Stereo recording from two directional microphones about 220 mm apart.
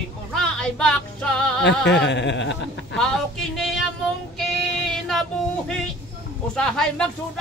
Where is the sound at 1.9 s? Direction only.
50° left (ahead or behind).